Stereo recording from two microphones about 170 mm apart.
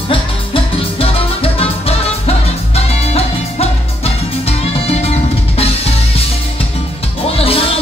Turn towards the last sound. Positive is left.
turn(degrees=35)  # may be behind; listen again after turning